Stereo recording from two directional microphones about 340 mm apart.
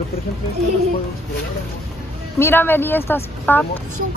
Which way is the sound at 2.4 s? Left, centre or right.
Centre.